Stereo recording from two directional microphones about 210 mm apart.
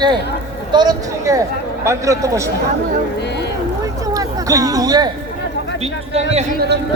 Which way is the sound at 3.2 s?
55° left (ahead or behind).